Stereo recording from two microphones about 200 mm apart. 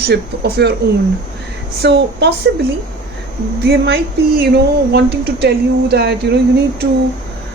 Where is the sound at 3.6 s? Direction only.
50° right (ahead or behind).